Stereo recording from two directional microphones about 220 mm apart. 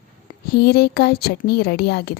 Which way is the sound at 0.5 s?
45° left (ahead or behind).